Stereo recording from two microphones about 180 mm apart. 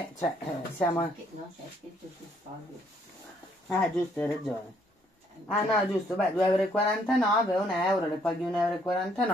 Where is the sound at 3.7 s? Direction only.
5° left (ahead or behind).